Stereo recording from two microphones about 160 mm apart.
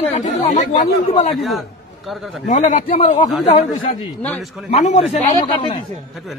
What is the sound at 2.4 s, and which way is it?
Speech, 50° left (ahead or behind).